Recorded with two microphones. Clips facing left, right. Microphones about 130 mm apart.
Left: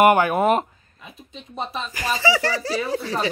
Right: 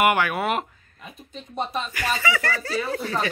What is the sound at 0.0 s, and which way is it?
Speech, 40° left (ahead or behind).